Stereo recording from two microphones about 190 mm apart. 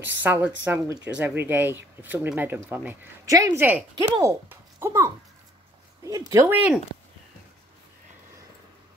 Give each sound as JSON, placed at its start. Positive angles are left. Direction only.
{"t": 0.2, "sound": "a child's voice", "side_deg": -10}